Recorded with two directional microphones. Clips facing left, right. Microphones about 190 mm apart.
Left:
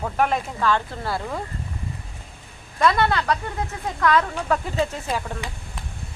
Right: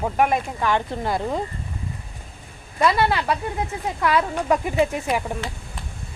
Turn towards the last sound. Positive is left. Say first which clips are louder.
# right 4 dB
turn(degrees=-15)  # may be behind; listen again after turning